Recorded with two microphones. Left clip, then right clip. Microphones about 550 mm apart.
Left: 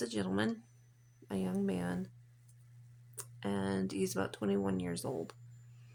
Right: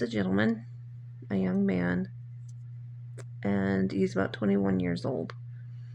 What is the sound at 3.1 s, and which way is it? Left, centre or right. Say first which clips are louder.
Speech: right 7 dB; left.